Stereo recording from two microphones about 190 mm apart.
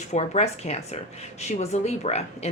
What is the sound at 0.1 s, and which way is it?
A woman's voice, 35° left (ahead or behind).